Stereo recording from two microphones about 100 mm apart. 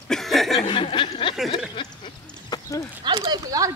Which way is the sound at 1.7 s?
50° left (ahead or behind).